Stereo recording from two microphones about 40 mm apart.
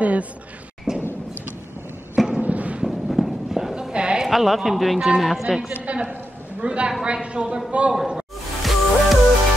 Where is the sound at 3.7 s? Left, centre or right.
Right.